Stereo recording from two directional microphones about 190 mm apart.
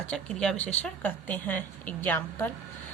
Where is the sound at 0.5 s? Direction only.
35° left (ahead or behind).